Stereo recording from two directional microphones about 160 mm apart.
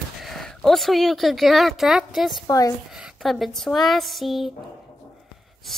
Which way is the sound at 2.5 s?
20° left (ahead or behind).